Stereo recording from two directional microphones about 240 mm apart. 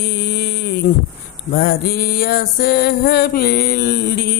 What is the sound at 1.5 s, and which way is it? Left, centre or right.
Mantra, left.